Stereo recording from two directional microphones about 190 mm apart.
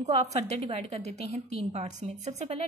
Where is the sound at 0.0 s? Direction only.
35° right (ahead or behind).